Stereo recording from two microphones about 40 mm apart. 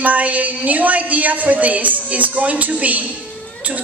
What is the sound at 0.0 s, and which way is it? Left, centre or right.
A woman's voice, right.